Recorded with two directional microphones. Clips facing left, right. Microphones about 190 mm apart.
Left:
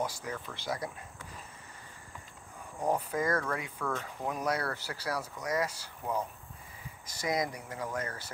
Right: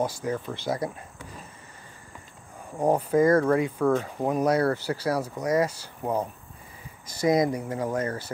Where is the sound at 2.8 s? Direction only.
35° right (ahead or behind).